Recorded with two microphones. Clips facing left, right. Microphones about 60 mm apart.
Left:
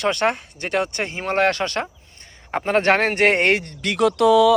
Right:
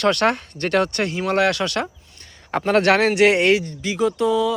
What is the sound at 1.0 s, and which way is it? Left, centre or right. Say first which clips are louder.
Speech: right 1 dB; left.